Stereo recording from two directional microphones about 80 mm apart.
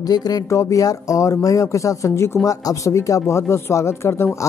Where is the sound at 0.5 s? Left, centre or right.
Left.